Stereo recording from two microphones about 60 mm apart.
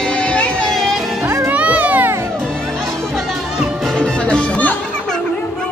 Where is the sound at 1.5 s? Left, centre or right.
Right.